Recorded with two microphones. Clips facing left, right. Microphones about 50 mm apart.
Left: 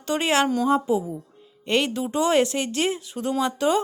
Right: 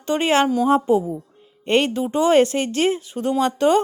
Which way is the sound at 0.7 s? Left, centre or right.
Right.